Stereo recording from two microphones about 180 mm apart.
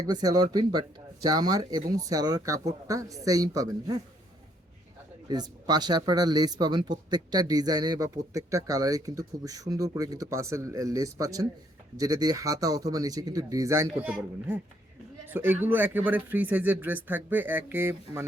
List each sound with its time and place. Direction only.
0.1 s speech: 20° right (ahead or behind)
5.3 s a man's voice: 20° right (ahead or behind)